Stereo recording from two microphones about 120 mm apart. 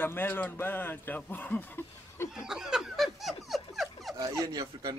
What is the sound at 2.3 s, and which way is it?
Snicker, 5° right (ahead or behind).